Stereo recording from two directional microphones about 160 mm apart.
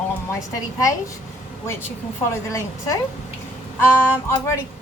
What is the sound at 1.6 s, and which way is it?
A woman's voice, 15° left (ahead or behind).